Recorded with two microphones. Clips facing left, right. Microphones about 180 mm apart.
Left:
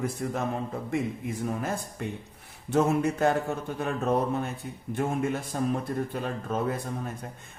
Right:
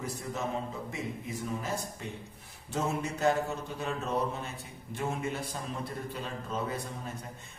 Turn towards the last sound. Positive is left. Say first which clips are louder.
# left 5 dB
turn(degrees=55)  # may be behind; listen again after turning